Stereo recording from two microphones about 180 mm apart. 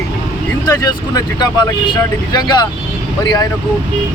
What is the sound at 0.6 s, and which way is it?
Speech, 20° left (ahead or behind).